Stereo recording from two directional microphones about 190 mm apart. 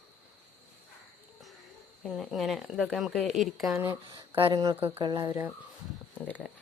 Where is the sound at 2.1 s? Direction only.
Centre (ahead or behind).